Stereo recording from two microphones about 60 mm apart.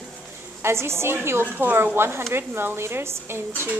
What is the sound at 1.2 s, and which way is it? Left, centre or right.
Speech, right.